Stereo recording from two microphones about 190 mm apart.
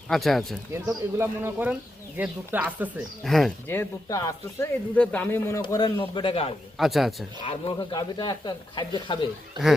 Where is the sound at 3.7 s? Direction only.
15° left (ahead or behind).